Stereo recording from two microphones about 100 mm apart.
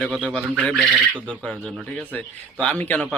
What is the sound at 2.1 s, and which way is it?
Speech, 15° left (ahead or behind).